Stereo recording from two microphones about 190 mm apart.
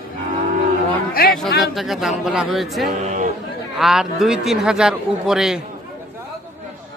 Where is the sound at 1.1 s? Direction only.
50° left (ahead or behind).